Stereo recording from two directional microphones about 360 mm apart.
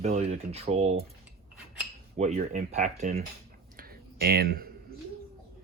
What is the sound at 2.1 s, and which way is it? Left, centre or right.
Speech, centre.